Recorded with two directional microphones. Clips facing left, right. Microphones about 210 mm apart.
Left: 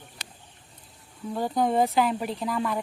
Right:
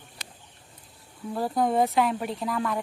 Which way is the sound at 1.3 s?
Centre (ahead or behind).